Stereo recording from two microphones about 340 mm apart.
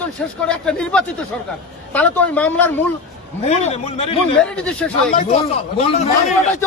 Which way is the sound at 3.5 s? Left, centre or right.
Centre.